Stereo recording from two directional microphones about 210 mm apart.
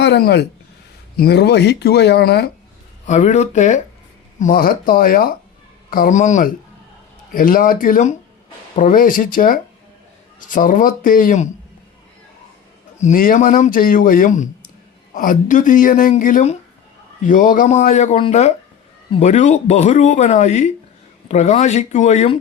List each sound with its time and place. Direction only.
0.0 s speech: 50° left (ahead or behind)
3.1 s speech: 35° left (ahead or behind)
13.0 s speech: 40° left (ahead or behind)